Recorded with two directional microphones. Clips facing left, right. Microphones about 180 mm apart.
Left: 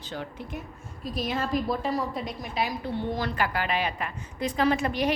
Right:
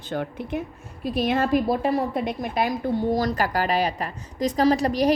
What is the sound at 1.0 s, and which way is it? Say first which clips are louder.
A woman's voice: right 7 dB; 65° right (ahead or behind).